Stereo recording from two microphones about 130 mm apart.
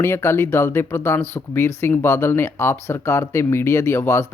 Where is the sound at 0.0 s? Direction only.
20° left (ahead or behind).